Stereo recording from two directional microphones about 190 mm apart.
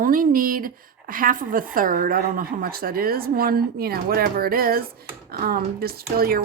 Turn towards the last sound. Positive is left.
turn(degrees=-50)  # may be behind; listen again after turning